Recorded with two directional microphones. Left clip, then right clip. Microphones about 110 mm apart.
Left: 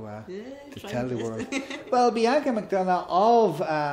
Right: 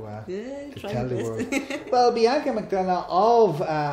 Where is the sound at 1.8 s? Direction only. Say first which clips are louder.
Right 2 dB; 30° left (ahead or behind).